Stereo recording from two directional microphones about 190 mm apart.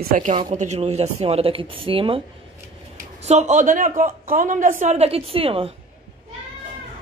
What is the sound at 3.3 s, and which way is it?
Speech, 35° right (ahead or behind).